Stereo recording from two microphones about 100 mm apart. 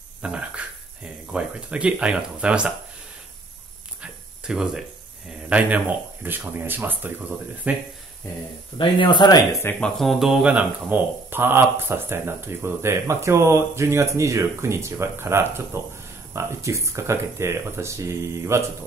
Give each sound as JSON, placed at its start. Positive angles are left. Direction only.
{"t": 0.2, "sound": "speech", "side_deg": -10}
{"t": 4.0, "sound": "a sound", "side_deg": -5}
{"t": 5.5, "sound": "speech", "side_deg": -15}
{"t": 8.7, "sound": "speech", "side_deg": 55}
{"t": 9.5, "sound": "speech", "side_deg": 25}
{"t": 9.8, "sound": "speech", "side_deg": 5}